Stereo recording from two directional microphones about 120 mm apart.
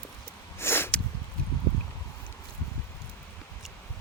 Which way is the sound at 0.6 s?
20° left (ahead or behind).